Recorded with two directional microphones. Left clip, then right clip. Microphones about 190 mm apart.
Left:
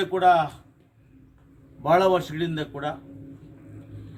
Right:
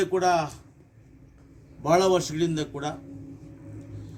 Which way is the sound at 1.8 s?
Centre (ahead or behind).